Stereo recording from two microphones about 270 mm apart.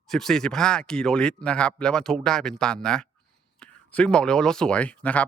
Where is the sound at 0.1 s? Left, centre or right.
Centre.